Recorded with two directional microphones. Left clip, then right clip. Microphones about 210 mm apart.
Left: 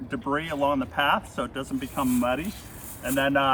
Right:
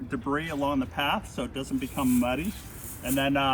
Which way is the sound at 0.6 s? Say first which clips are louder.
Left 6 dB; 15° left (ahead or behind).